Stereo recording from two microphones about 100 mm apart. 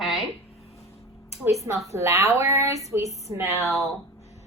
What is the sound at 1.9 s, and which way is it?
A woman's voice, 30° right (ahead or behind).